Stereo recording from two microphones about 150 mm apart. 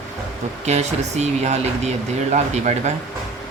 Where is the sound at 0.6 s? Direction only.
50° right (ahead or behind).